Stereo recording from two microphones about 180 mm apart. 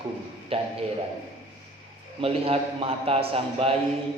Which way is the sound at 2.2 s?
30° right (ahead or behind).